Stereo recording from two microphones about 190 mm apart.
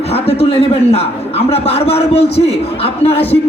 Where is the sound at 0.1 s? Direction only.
30° left (ahead or behind).